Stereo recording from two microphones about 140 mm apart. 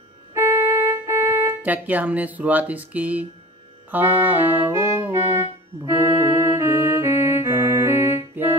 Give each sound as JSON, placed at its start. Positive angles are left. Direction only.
{"t": 0.3, "sound": "music", "side_deg": -20}